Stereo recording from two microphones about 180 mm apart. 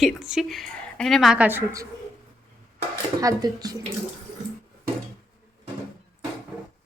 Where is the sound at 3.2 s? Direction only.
20° right (ahead or behind).